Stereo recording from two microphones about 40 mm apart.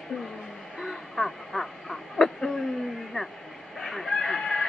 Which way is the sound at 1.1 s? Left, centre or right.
Centre.